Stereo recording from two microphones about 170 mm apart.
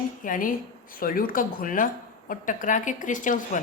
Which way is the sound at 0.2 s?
50° left (ahead or behind).